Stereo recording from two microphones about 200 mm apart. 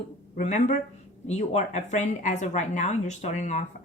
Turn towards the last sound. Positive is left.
turn(degrees=35)  # may be behind; listen again after turning